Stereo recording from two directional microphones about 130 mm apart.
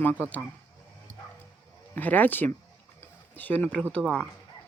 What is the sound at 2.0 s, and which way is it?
Speech, 15° left (ahead or behind).